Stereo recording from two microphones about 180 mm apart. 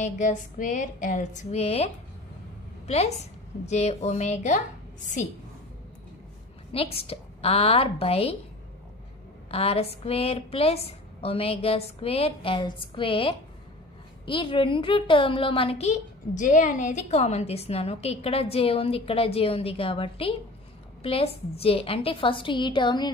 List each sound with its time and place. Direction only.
0.0 s a sound: 45° left (ahead or behind)
2.9 s a woman's voice: 35° left (ahead or behind)
6.7 s a woman's voice: 30° left (ahead or behind)
9.5 s a woman's voice: 35° left (ahead or behind)